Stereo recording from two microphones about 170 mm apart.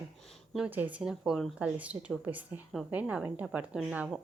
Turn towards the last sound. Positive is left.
turn(degrees=-5)  # may be behind; listen again after turning